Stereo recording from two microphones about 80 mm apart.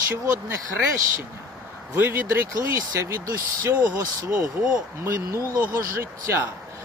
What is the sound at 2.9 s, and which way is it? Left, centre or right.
Speech, right.